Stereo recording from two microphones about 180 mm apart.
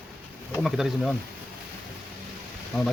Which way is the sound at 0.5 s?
Centre (ahead or behind).